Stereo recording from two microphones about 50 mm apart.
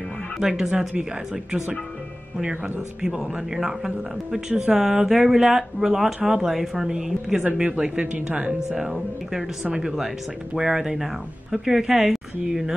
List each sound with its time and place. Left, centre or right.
0.4 s speech: centre
3.0 s speech: centre
8.0 s speech: right; by 12.7 s centre